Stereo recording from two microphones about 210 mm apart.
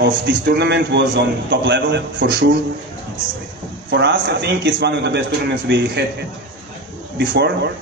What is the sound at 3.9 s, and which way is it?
A man's voice, 55° right (ahead or behind).